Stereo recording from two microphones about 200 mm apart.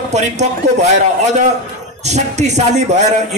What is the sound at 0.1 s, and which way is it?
Speech, 35° right (ahead or behind).